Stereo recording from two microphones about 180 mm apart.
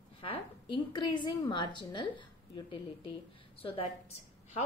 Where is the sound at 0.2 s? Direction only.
30° left (ahead or behind).